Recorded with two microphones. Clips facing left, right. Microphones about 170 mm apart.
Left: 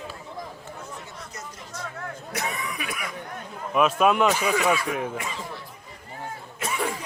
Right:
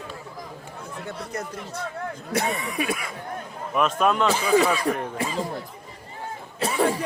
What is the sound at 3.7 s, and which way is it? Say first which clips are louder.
Speech: left 2 dB; 5° left (ahead or behind).